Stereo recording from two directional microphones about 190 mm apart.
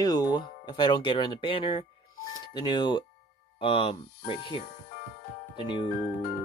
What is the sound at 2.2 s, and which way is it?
Music, 25° left (ahead or behind).